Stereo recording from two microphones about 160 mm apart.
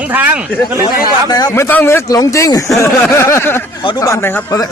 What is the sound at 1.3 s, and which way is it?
Speech, 20° left (ahead or behind).